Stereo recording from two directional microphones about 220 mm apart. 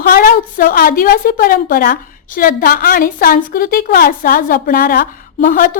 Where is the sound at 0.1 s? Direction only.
40° left (ahead or behind).